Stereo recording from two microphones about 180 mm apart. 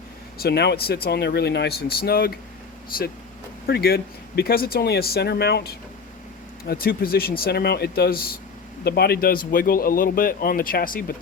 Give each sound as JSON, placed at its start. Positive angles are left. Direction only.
{"t": 0.3, "sound": "a man's voice", "side_deg": 60}